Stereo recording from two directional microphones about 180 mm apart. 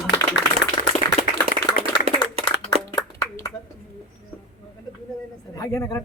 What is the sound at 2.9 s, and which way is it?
Clapping, 20° left (ahead or behind).